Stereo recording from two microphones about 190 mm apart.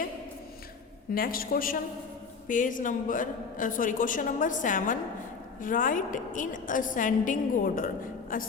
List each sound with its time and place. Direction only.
1.1 s a man's voice: 50° left (ahead or behind)